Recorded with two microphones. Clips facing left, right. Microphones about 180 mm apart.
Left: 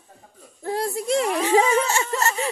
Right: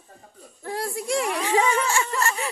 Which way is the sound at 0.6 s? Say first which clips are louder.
Left 4 dB; 25° left (ahead or behind).